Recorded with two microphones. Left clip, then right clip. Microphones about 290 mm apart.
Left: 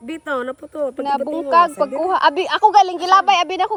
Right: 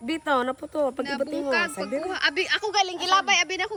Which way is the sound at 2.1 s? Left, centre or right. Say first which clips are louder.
Left 7 dB; centre.